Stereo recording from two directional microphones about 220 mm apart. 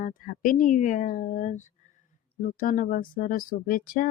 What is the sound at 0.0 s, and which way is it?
Speech, 35° left (ahead or behind).